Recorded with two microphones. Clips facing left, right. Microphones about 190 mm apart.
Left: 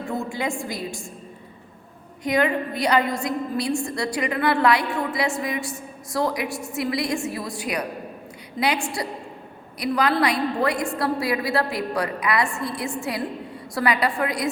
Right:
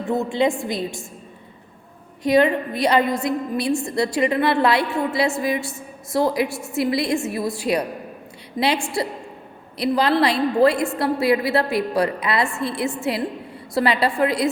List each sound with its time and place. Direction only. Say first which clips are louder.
0.1 s a woman's voice: right 8 dB; 20° right (ahead or behind)
2.2 s a woman's voice: right 5 dB; 25° right (ahead or behind)